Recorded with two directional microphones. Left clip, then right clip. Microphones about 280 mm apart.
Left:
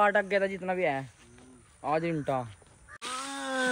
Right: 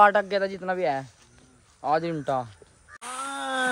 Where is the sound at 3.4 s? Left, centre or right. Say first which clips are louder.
Right 4 dB; centre.